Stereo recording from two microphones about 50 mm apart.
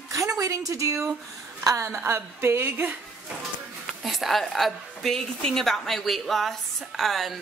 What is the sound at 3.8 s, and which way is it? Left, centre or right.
A woman's voice, centre.